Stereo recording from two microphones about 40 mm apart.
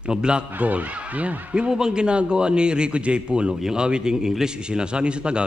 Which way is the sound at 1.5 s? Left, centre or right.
Centre.